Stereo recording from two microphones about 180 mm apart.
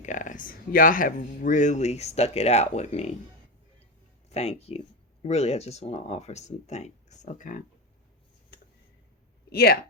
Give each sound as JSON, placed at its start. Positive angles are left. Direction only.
{"t": 0.0, "sound": "speech", "side_deg": 45}
{"t": 4.3, "sound": "speech", "side_deg": 35}
{"t": 9.5, "sound": "speech", "side_deg": 60}